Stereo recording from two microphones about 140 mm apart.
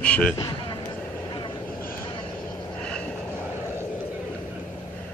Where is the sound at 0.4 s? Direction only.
30° left (ahead or behind).